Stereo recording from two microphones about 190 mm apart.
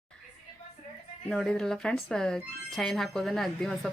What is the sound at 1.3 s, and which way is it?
A woman's voice, 5° left (ahead or behind).